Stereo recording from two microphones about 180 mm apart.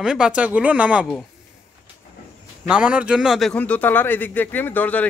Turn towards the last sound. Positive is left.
turn(degrees=10)  # may be behind; listen again after turning